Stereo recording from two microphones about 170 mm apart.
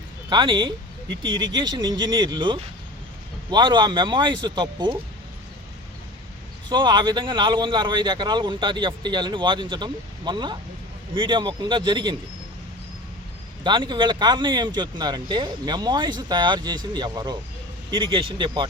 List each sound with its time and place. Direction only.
0.3 s speech: 30° right (ahead or behind)
6.7 s speech: 25° right (ahead or behind)
13.7 s speech: 25° right (ahead or behind)